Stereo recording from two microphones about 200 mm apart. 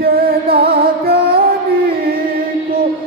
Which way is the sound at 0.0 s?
50° right (ahead or behind).